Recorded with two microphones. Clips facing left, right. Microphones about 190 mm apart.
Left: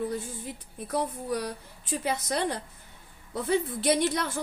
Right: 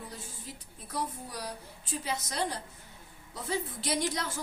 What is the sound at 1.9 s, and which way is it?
A woman's voice, 60° left (ahead or behind).